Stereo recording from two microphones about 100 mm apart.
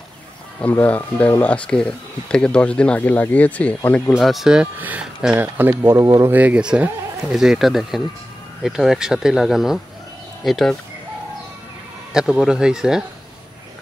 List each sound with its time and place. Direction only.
0.6 s speech: 15° left (ahead or behind)
4.1 s speech: centre (ahead or behind)
4.7 s speech: 15° right (ahead or behind)
5.9 s speech: 35° right (ahead or behind)
6.3 s speech: 15° right (ahead or behind)
12.1 s speech: 5° right (ahead or behind)